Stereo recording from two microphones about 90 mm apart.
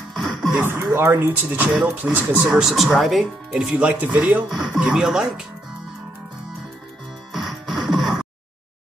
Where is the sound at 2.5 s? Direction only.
5° right (ahead or behind).